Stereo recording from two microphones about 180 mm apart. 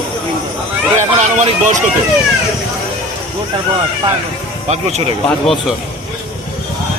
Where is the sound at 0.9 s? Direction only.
40° right (ahead or behind).